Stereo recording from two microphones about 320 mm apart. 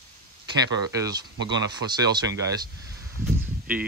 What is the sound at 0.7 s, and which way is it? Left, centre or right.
Speech, centre.